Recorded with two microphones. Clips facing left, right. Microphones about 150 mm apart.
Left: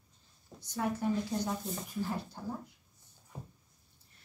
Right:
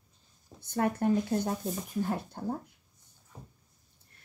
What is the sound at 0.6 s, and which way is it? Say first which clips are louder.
A woman's voice: right 5 dB; 60° right (ahead or behind).